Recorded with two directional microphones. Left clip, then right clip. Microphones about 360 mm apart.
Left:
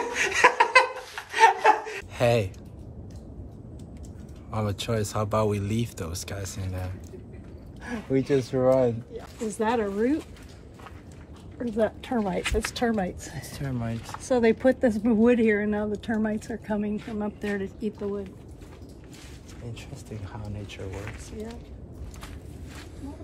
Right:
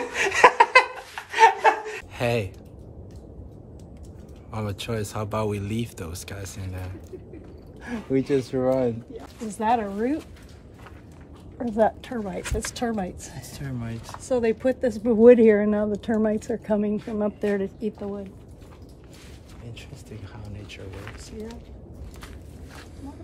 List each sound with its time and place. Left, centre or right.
0.1 s laughter: centre
2.1 s speech: centre
4.5 s speech: centre
12.3 s speech: centre
13.5 s speech: centre
15.0 s speech: centre